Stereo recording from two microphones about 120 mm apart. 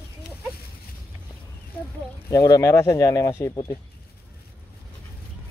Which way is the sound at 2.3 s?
30° left (ahead or behind).